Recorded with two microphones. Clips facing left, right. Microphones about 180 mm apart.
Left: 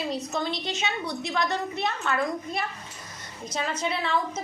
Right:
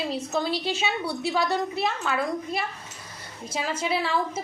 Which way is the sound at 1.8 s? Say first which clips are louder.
Right 1 dB; 5° right (ahead or behind).